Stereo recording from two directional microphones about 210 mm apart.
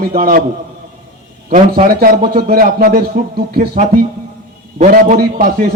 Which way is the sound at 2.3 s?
45° right (ahead or behind).